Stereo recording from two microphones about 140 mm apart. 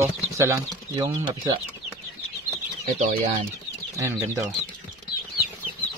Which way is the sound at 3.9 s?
20° right (ahead or behind).